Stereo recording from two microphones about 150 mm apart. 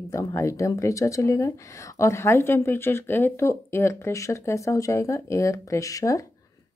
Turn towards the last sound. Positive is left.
turn(degrees=20)  # may be behind; listen again after turning